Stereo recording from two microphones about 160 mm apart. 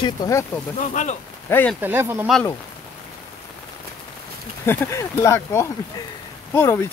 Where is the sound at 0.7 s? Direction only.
50° left (ahead or behind).